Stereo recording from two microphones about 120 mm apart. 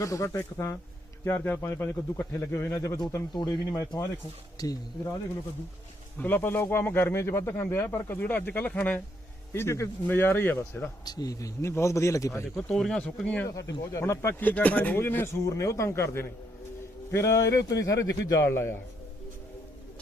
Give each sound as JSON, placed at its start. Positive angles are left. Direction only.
{"t": 0.0, "sound": "speech", "side_deg": 25}
{"t": 3.3, "sound": "speech", "side_deg": 35}
{"t": 6.1, "sound": "speech", "side_deg": 15}
{"t": 11.0, "sound": "speech", "side_deg": 35}
{"t": 12.6, "sound": "speech", "side_deg": 5}
{"t": 13.6, "sound": "speech", "side_deg": 25}